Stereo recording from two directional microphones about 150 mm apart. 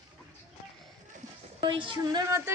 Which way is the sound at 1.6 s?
35° right (ahead or behind).